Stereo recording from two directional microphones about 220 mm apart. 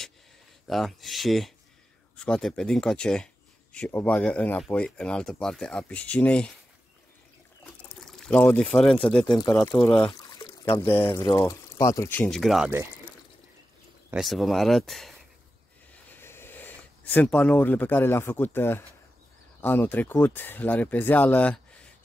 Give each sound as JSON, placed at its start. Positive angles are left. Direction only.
{"t": 0.7, "sound": "speech", "side_deg": 0}
{"t": 7.6, "sound": "pour", "side_deg": 5}
{"t": 9.0, "sound": "speech", "side_deg": 5}
{"t": 14.1, "sound": "speech", "side_deg": 0}
{"t": 15.9, "sound": "a sound", "side_deg": 10}
{"t": 19.6, "sound": "speech", "side_deg": 10}